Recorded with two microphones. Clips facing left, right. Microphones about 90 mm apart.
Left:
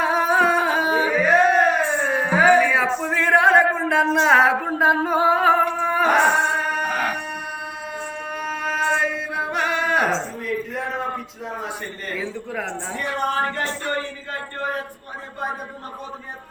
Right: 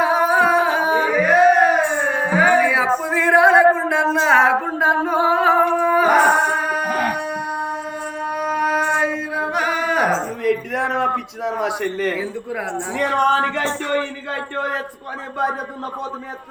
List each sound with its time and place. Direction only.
0.0 s a sound: 5° right (ahead or behind)
2.5 s music: 10° right (ahead or behind)
3.0 s a sound: 5° right (ahead or behind)
4.8 s singing: centre (ahead or behind)
8.2 s mantra: 10° right (ahead or behind)
9.1 s chant: 5° right (ahead or behind)
10.4 s a man's voice: 70° right (ahead or behind); by 12.1 s 90° right
12.9 s music: 85° right